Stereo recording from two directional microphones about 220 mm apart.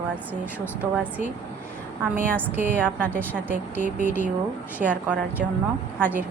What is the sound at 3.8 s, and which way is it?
Speech, 35° left (ahead or behind).